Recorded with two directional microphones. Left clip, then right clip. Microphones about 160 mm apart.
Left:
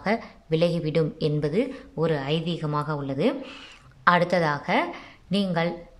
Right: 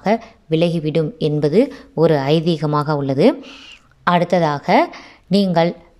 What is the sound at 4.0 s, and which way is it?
A woman's voice, 20° right (ahead or behind).